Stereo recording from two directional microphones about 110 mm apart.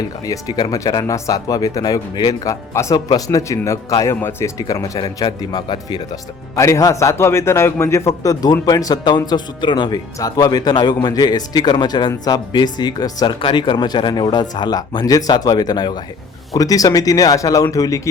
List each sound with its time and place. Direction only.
0.3 s a man's voice: 35° left (ahead or behind)
4.6 s speech: 35° left (ahead or behind)
6.6 s a man's voice: 30° left (ahead or behind)